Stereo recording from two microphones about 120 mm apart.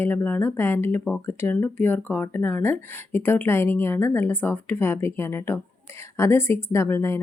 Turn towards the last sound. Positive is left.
turn(degrees=20)  # may be behind; listen again after turning